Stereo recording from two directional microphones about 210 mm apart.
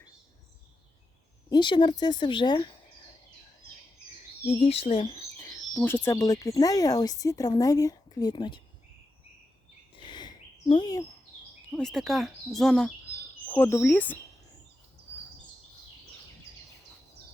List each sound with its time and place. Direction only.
1.5 s a woman's voice: 20° left (ahead or behind)
4.4 s a woman's voice: 30° left (ahead or behind)
5.4 s speech: 15° left (ahead or behind)
9.9 s a sound: 20° left (ahead or behind)
11.7 s speech: 5° left (ahead or behind)
13.5 s speech: 10° left (ahead or behind)